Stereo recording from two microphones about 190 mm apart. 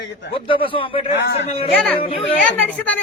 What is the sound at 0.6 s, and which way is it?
Speech, 30° left (ahead or behind).